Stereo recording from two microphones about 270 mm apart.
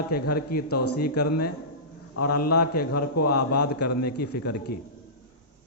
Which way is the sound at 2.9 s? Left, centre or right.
Left.